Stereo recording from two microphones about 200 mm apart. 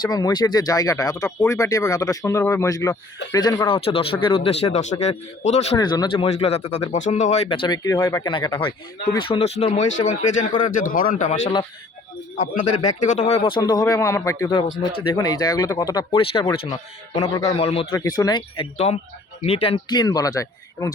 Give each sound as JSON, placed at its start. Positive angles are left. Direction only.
{"t": 0.0, "sound": "speech", "side_deg": 20}
{"t": 5.7, "sound": "speech", "side_deg": 20}
{"t": 6.2, "sound": "speech", "side_deg": 30}
{"t": 7.5, "sound": "speech", "side_deg": 25}
{"t": 17.5, "sound": "speech", "side_deg": 30}
{"t": 17.9, "sound": "speech", "side_deg": 20}